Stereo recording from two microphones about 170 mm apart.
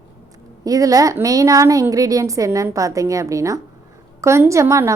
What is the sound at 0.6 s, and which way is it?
A woman's voice, 20° right (ahead or behind).